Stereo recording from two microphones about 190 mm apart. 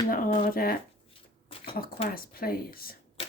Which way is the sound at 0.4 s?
50° left (ahead or behind).